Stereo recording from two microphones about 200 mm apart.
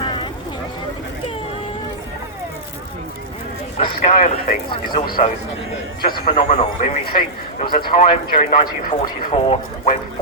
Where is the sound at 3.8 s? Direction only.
35° left (ahead or behind).